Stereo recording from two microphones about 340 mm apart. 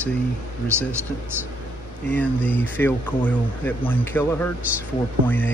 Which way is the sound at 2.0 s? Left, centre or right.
Centre.